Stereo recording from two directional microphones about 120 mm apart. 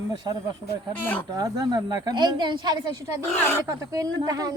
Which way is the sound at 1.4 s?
30° right (ahead or behind).